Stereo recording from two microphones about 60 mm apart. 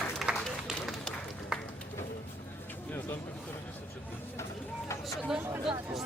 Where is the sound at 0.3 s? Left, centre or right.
Centre.